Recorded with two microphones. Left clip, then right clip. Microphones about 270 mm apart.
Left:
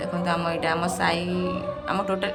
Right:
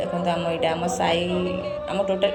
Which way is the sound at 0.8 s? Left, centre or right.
Left.